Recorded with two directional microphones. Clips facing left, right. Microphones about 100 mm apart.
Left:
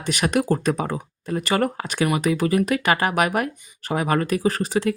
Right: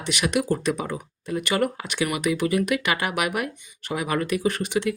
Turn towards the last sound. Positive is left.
turn(degrees=35)  # may be behind; listen again after turning